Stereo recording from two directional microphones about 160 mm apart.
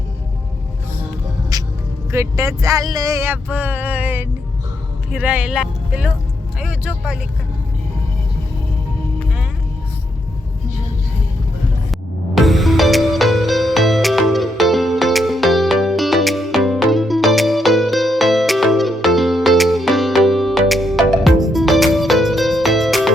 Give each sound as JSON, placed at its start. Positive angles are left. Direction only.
{"t": 1.5, "sound": "music", "side_deg": -25}
{"t": 2.1, "sound": "speech", "side_deg": -20}
{"t": 11.9, "sound": "music", "side_deg": 0}